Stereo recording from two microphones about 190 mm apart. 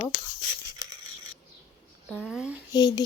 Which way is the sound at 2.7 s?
20° left (ahead or behind).